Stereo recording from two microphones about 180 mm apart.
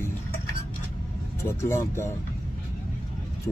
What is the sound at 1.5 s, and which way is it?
Speech, 15° left (ahead or behind).